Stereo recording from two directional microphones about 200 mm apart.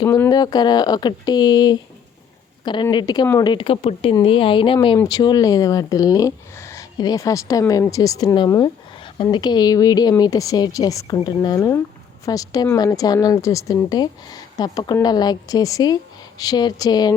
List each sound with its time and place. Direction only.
0.0 s speech: 15° left (ahead or behind)
2.9 s speech: 20° left (ahead or behind)